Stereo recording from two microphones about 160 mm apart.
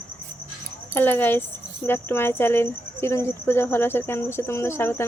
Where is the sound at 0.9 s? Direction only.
15° left (ahead or behind).